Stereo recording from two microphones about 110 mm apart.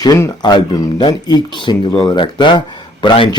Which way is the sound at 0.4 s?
40° left (ahead or behind).